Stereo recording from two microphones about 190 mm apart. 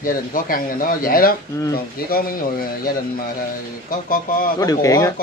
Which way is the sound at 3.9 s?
50° left (ahead or behind).